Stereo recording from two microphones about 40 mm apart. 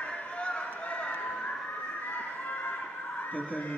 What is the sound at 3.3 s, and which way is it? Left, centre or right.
Speech, left.